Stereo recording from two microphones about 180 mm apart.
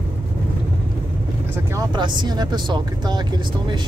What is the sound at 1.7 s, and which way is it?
Speech, 25° right (ahead or behind).